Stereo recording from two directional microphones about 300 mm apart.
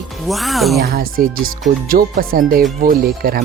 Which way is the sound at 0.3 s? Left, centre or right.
Centre.